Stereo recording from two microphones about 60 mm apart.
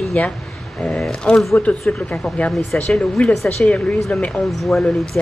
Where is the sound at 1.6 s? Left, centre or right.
Left.